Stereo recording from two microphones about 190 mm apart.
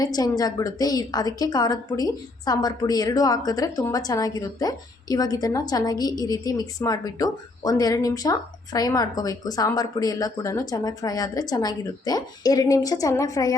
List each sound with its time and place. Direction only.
0.0 s a woman's voice: 20° left (ahead or behind)